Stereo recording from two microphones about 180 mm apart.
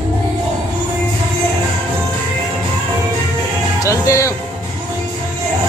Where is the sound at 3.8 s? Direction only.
15° left (ahead or behind).